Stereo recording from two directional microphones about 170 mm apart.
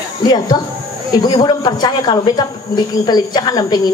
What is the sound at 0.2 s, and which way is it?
Speech, 25° left (ahead or behind).